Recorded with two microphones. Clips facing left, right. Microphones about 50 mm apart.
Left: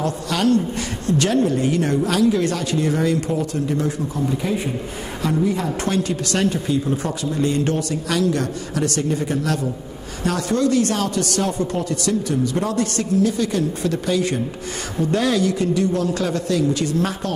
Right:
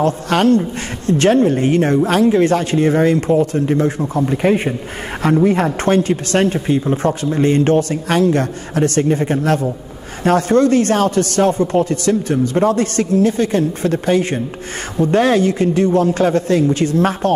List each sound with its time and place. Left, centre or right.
0.0 s speech: right